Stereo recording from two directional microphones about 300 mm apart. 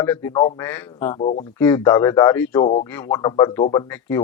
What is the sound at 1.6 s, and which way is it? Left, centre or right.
Speech, centre.